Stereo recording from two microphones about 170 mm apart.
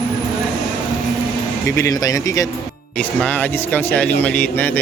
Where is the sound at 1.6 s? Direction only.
15° left (ahead or behind).